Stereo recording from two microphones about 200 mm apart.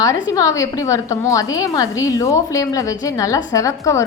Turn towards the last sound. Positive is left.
turn(degrees=15)  # may be behind; listen again after turning